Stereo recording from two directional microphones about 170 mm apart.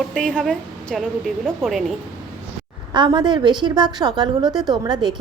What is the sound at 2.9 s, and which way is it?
A woman's voice, 25° right (ahead or behind).